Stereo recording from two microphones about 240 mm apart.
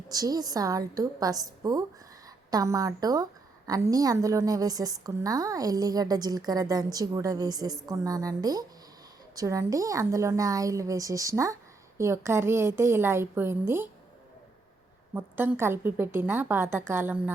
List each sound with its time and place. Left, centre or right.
0.1 s a woman's voice: centre
15.1 s a woman's voice: centre